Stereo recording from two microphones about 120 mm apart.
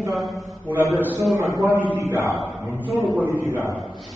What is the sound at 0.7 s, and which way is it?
A man's voice, 15° right (ahead or behind).